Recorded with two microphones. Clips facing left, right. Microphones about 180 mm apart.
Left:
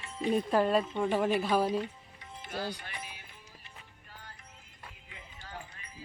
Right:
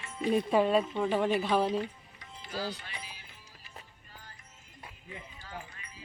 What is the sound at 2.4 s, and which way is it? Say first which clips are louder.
Music: even; 55° left (ahead or behind).